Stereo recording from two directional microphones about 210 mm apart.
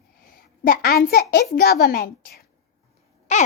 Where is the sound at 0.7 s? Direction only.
45° left (ahead or behind).